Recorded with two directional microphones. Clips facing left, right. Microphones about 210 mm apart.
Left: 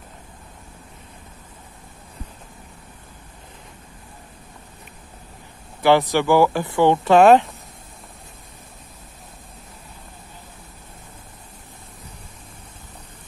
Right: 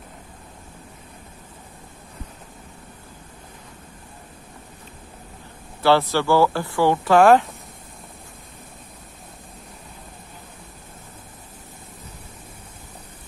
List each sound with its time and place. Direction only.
5.8 s speech: 15° left (ahead or behind)